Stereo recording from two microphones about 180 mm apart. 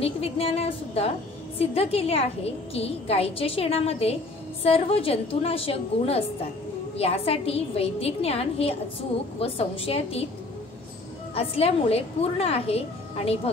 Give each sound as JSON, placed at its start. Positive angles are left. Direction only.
{"t": 0.0, "sound": "a woman's voice", "side_deg": 35}
{"t": 11.3, "sound": "a woman's voice", "side_deg": 35}